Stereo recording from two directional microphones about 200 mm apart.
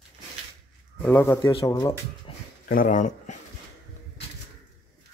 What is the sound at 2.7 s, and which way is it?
Speech, 40° left (ahead or behind).